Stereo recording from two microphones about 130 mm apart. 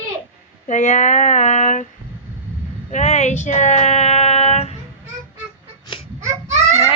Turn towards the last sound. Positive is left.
turn(degrees=-60)  # may be behind; listen again after turning